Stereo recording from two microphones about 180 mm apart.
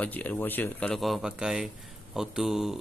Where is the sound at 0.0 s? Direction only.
10° left (ahead or behind).